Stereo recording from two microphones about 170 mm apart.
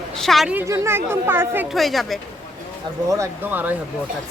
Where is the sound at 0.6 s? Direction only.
15° right (ahead or behind).